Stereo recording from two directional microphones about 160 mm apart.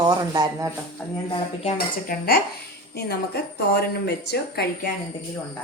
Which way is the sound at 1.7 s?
75° left (ahead or behind).